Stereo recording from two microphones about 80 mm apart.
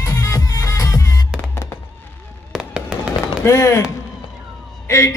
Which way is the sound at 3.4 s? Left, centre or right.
Left.